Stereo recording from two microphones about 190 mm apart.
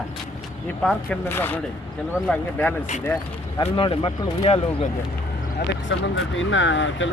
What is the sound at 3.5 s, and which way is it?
Speech, 25° left (ahead or behind).